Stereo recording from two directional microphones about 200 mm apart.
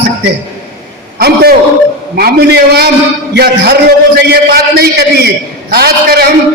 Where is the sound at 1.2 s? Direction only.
50° right (ahead or behind).